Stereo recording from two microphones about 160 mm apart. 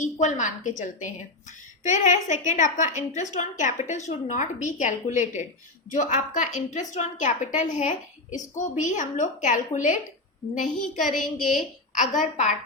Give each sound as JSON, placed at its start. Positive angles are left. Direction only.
{"t": 0.0, "sound": "a woman's voice", "side_deg": 50}
{"t": 11.0, "sound": "a woman's voice", "side_deg": 0}
{"t": 11.9, "sound": "a woman's voice", "side_deg": 50}